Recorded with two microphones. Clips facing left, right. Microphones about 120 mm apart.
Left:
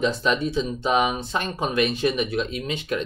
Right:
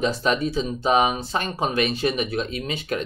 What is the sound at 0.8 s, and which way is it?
Speech, 35° right (ahead or behind).